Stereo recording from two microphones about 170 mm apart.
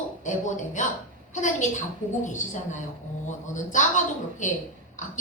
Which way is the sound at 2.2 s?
45° left (ahead or behind).